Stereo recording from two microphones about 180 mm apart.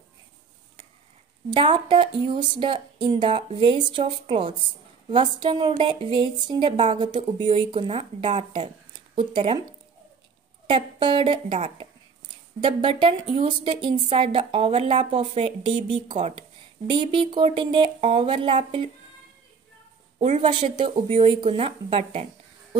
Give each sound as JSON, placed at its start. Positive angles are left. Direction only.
{"t": 1.5, "sound": "a woman's voice", "side_deg": -25}
{"t": 10.7, "sound": "a woman's voice", "side_deg": -30}
{"t": 20.4, "sound": "speech", "side_deg": -25}